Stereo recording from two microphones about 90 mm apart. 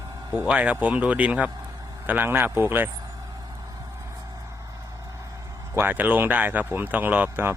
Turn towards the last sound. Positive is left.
turn(degrees=-20)  # may be behind; listen again after turning